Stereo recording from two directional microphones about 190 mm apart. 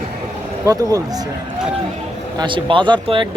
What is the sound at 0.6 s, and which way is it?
Speech, 15° right (ahead or behind).